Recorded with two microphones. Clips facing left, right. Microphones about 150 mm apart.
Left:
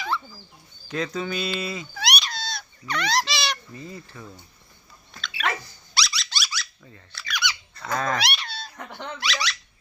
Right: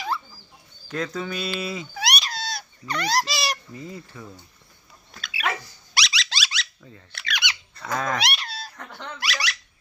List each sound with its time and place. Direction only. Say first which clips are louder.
0.9 s a sound: left 1 dB; centre (ahead or behind)
3.8 s speech: right 2 dB; 20° right (ahead or behind)
5.2 s bird: even; 5° right (ahead or behind)
6.1 s squeak: right 1 dB; 90° right; by 7.5 s 65° right (ahead or behind)
7.8 s speech: even; 5° right (ahead or behind)
8.7 s speech: left 2 dB; 15° left (ahead or behind)
9.2 s speech: left 1 dB; 10° right (ahead or behind)